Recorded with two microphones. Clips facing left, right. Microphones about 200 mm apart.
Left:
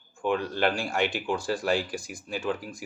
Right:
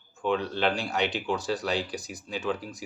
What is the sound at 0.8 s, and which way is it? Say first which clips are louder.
Speech: left 1 dB; 50° left (ahead or behind).